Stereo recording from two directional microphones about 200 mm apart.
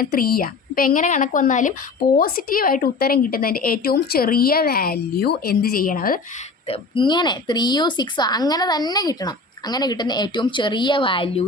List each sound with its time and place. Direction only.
0.0 s a woman's voice: 50° left (ahead or behind)
6.7 s a woman's voice: 25° left (ahead or behind)